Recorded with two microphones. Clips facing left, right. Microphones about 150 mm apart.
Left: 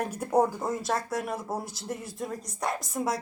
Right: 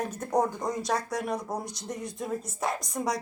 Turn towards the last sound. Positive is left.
turn(degrees=5)  # may be behind; listen again after turning